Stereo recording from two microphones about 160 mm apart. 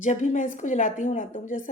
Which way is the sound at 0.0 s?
50° left (ahead or behind).